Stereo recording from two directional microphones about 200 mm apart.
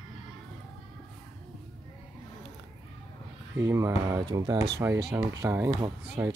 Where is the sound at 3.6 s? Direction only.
15° right (ahead or behind).